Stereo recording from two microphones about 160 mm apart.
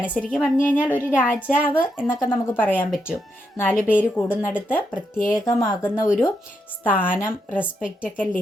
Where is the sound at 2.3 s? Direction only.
10° left (ahead or behind).